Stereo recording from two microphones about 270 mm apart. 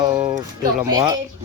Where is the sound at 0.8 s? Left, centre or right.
Centre.